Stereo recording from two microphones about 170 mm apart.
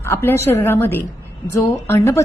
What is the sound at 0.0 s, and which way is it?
A woman's voice, 15° left (ahead or behind).